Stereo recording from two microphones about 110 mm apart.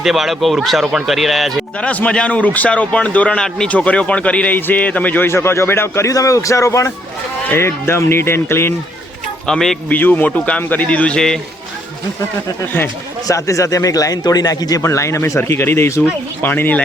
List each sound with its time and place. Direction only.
0.0 s speech: centre (ahead or behind)
1.8 s a man's voice: 10° left (ahead or behind)
9.5 s speech: 5° left (ahead or behind)
10.0 s a man's voice: 15° left (ahead or behind)
13.2 s a man's voice: 30° left (ahead or behind)